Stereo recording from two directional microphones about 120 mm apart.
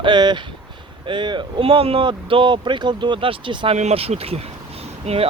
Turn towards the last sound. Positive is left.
turn(degrees=-60)  # may be behind; listen again after turning